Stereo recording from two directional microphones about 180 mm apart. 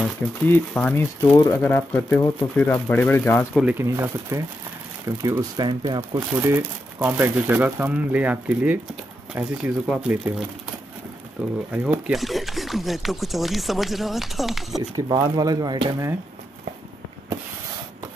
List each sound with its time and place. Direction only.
0.5 s speech: 10° left (ahead or behind)
3.7 s speech: 15° right (ahead or behind)
11.4 s speech: 5° right (ahead or behind)
15.0 s speech: 25° right (ahead or behind)